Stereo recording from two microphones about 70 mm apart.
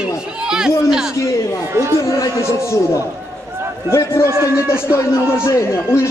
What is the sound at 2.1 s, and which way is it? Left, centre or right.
Speech, left.